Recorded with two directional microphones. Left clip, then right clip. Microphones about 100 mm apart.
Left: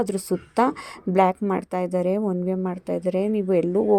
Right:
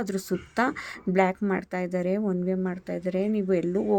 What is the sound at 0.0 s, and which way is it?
Speech, 35° left (ahead or behind).